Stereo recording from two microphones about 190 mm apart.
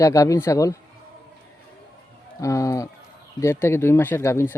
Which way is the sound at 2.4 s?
15° left (ahead or behind).